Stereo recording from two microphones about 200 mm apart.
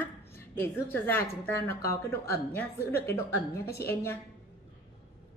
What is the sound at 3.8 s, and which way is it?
Speech, 10° left (ahead or behind).